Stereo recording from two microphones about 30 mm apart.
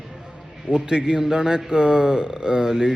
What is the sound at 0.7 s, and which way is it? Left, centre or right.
A man's voice, right.